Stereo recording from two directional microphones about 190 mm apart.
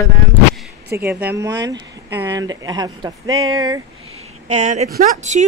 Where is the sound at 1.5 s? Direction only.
20° right (ahead or behind).